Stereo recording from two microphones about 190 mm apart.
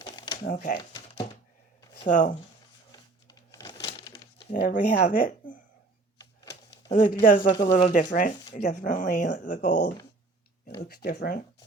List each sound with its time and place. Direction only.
0.0 s typewriter: 20° left (ahead or behind)
0.4 s speech: 45° left (ahead or behind)
2.0 s speech: 40° left (ahead or behind)
2.9 s crumpling: 20° left (ahead or behind)
4.6 s speech: 45° left (ahead or behind)
6.1 s a sound: 20° left (ahead or behind)
6.9 s speech: 45° left (ahead or behind)
7.5 s speech: 25° left (ahead or behind)
7.8 s speech: 40° left (ahead or behind)